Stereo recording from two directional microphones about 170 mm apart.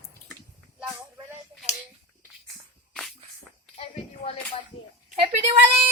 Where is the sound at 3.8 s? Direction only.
35° left (ahead or behind).